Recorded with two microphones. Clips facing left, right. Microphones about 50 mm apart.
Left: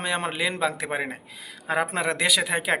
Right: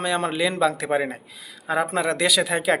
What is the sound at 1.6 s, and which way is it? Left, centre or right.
Speech, left.